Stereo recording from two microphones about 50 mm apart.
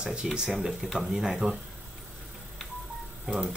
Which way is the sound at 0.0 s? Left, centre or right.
Centre.